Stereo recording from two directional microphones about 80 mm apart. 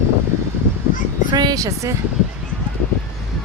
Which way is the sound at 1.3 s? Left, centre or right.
Right.